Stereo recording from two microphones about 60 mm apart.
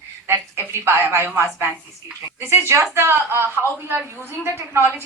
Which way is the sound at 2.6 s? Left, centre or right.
Right.